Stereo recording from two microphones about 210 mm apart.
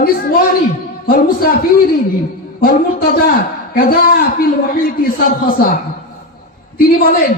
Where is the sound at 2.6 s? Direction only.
40° left (ahead or behind).